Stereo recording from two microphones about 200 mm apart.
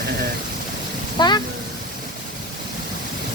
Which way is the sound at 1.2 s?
20° left (ahead or behind).